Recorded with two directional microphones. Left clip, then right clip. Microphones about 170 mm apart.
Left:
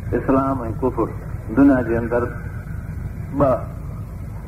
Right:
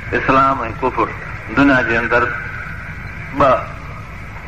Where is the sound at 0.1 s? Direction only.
35° right (ahead or behind).